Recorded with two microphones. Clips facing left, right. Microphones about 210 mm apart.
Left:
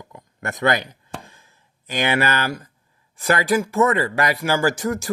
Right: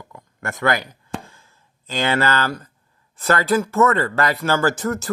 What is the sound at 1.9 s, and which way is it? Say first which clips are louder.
Speech: right 1 dB; 15° left (ahead or behind).